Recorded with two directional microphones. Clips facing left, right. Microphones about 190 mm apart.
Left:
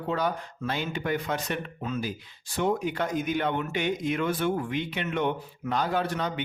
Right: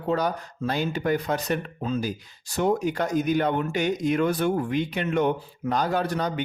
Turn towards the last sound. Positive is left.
turn(degrees=-40)  # may be behind; listen again after turning